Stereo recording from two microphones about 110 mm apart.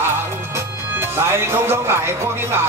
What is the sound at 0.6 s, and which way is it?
Music, 25° right (ahead or behind).